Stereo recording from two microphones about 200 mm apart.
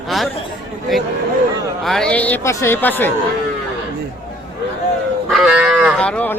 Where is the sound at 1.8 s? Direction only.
Centre (ahead or behind).